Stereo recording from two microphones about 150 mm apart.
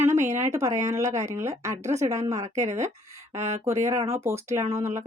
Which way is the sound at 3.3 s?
45° right (ahead or behind).